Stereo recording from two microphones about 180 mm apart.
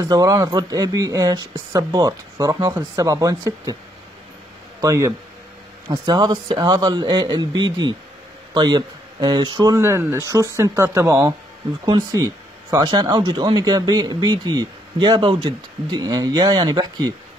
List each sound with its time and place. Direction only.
0.0 s speech: 20° right (ahead or behind)
4.8 s speech: 15° right (ahead or behind)